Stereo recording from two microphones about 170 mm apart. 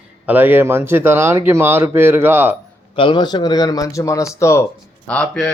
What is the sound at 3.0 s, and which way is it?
A man's voice, 25° left (ahead or behind).